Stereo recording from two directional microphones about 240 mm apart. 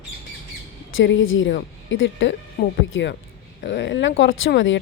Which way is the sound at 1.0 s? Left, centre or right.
Left.